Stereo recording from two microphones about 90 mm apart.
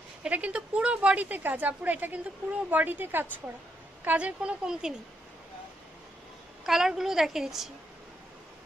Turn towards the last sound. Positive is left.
turn(degrees=-5)  # may be behind; listen again after turning